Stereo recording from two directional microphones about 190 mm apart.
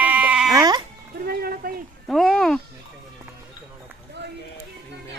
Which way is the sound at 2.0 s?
Centre (ahead or behind).